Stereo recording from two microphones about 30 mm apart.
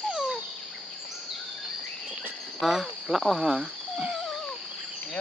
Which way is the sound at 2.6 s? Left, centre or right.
Centre.